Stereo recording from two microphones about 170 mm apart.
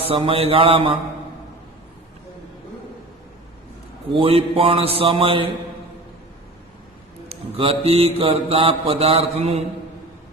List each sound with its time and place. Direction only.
0.0 s mantra: 30° right (ahead or behind)
4.1 s mantra: 35° right (ahead or behind)
7.3 s mantra: 35° right (ahead or behind)